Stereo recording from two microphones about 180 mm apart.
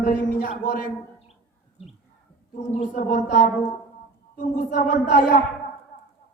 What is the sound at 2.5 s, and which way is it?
Speech, 40° left (ahead or behind).